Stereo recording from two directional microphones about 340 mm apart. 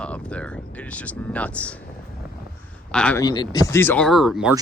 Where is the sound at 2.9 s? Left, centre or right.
Centre.